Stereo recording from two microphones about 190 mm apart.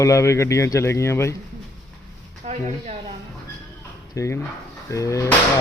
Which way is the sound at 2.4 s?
40° right (ahead or behind).